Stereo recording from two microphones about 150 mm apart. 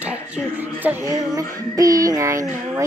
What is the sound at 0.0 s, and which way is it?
Speech, 10° right (ahead or behind).